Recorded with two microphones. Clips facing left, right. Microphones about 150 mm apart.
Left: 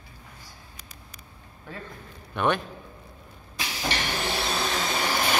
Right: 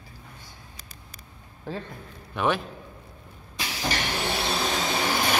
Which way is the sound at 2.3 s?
Centre (ahead or behind).